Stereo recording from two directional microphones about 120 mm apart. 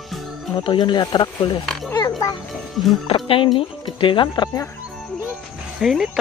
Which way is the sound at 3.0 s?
45° left (ahead or behind).